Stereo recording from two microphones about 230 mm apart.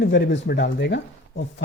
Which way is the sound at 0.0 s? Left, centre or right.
Left.